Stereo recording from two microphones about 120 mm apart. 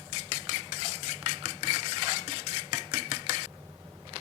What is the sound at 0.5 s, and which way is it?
Cutlery, 50° right (ahead or behind).